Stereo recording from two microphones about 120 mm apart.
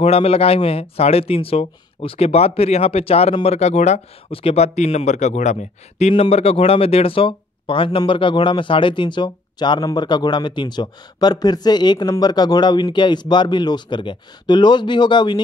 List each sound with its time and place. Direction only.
0.0 s speech: 55° left (ahead or behind)
4.3 s speech: 50° left (ahead or behind)
4.7 s speech: 70° left (ahead or behind); by 15.4 s 40° left (ahead or behind)